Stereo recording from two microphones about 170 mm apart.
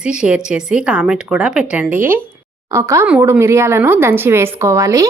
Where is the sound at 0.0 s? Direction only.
5° right (ahead or behind).